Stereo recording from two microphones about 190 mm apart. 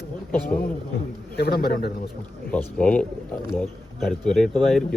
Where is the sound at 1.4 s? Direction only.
55° left (ahead or behind).